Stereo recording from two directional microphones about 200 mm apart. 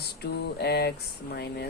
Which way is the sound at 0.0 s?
55° left (ahead or behind).